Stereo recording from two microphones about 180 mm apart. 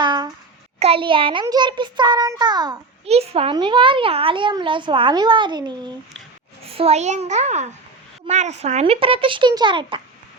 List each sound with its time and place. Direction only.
0.0 s a sound: 25° right (ahead or behind)
0.8 s a child's voice: 30° right (ahead or behind)
3.1 s a child's voice: 35° right (ahead or behind)